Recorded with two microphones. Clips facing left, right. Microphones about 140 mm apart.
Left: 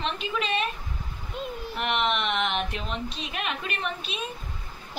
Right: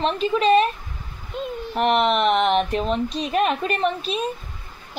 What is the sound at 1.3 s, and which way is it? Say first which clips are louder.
Speech: right 5 dB; centre (ahead or behind).